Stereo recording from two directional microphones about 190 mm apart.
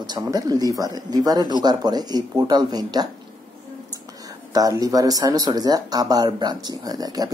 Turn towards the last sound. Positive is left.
turn(degrees=-20)  # may be behind; listen again after turning